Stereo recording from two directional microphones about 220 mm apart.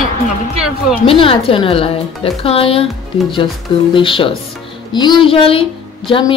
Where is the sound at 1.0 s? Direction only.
25° left (ahead or behind).